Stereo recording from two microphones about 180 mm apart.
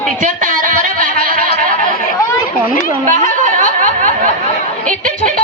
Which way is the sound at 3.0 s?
45° right (ahead or behind).